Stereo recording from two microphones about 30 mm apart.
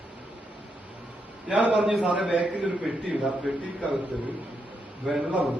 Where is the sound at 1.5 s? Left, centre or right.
Right.